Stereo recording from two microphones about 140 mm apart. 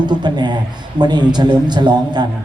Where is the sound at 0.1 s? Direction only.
30° right (ahead or behind).